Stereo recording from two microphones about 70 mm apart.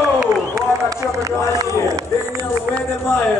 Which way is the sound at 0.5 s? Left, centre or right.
Right.